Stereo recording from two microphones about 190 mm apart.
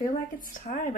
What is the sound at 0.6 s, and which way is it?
Speech, 40° left (ahead or behind).